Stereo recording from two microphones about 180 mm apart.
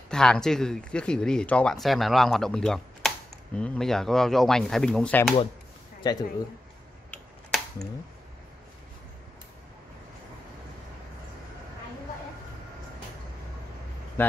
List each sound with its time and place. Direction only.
0.1 s speech: 5° left (ahead or behind)
6.0 s speech: 20° left (ahead or behind)